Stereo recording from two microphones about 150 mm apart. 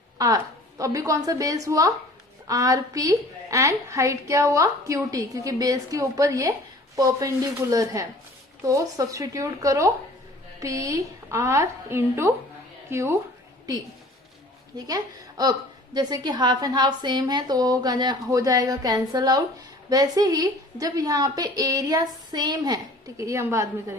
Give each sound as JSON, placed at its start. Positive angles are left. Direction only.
{"t": 0.2, "sound": "a woman's voice", "side_deg": -25}
{"t": 14.8, "sound": "a woman's voice", "side_deg": -25}